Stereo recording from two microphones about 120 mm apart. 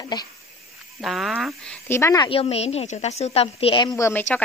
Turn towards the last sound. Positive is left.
turn(degrees=15)  # may be behind; listen again after turning